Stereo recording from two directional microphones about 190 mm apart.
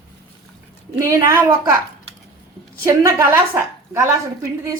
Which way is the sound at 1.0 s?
15° right (ahead or behind).